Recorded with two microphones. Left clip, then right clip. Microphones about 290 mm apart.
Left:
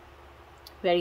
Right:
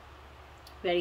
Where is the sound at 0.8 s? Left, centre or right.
Centre.